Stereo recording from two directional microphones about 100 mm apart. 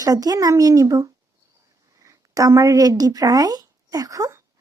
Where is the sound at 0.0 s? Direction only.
40° right (ahead or behind).